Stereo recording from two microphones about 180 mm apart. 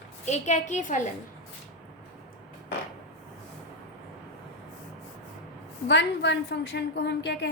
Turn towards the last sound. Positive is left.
turn(degrees=70)  # may be behind; listen again after turning